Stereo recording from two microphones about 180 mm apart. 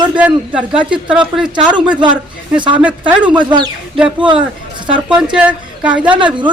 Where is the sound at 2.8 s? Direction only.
5° right (ahead or behind).